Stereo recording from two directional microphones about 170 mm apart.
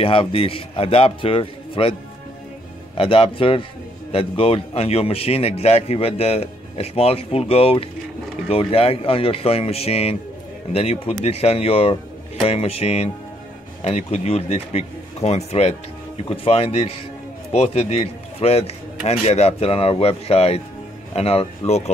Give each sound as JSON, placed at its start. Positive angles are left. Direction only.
{"t": 0.0, "sound": "a man's voice", "side_deg": 35}
{"t": 3.0, "sound": "a man's voice", "side_deg": 35}